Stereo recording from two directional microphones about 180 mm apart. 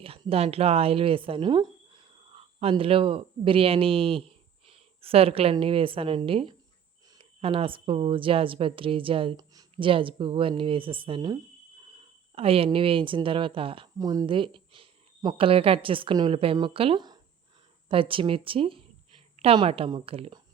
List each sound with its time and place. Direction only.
0.0 s a woman's voice: 30° right (ahead or behind)